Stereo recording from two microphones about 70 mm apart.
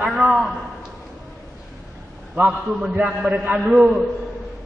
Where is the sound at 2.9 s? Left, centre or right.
Centre.